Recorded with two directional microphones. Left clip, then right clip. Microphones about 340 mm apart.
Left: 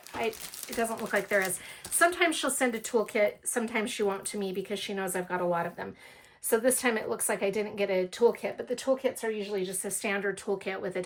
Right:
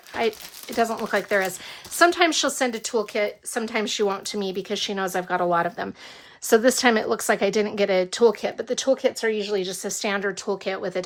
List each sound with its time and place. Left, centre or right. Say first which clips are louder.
0.8 s a woman's voice: right 7 dB; centre